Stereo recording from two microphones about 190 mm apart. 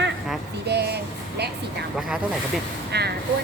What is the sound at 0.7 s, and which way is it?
Music, 60° right (ahead or behind).